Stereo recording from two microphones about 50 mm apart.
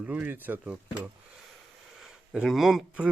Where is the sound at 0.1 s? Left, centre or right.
Right.